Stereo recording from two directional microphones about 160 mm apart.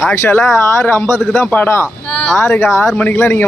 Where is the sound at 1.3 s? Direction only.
10° left (ahead or behind).